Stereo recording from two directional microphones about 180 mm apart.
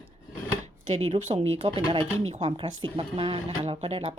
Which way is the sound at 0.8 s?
35° right (ahead or behind).